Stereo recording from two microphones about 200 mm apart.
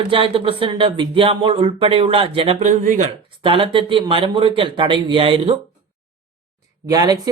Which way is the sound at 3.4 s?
25° right (ahead or behind).